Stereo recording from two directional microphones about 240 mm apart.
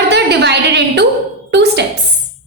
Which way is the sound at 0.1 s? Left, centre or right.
Right.